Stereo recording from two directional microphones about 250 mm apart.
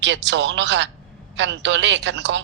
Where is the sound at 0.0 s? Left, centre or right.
Right.